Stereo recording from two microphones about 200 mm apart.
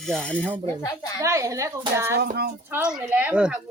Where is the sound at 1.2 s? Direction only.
15° right (ahead or behind).